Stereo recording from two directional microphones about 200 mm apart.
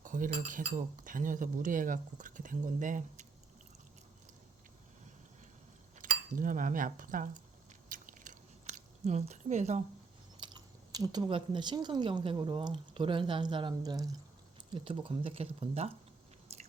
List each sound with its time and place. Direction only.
0.0 s speech: 40° right (ahead or behind)
6.0 s speech: 40° right (ahead or behind)
7.9 s biting: 40° right (ahead or behind)
10.4 s speech: 20° right (ahead or behind)